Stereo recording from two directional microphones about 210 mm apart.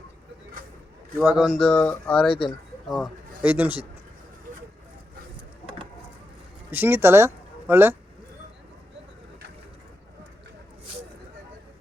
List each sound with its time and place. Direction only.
1.2 s speech: 5° right (ahead or behind)
6.7 s speech: 10° right (ahead or behind)